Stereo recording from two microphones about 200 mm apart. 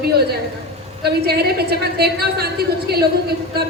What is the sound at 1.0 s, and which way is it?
A woman's voice, 50° right (ahead or behind).